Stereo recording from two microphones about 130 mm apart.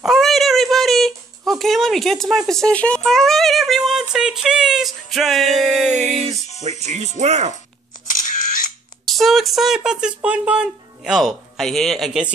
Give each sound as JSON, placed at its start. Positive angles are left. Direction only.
{"t": 0.0, "sound": "speech", "side_deg": 0}
{"t": 5.9, "sound": "music", "side_deg": 5}
{"t": 6.8, "sound": "speech", "side_deg": -60}
{"t": 9.0, "sound": "speech", "side_deg": 0}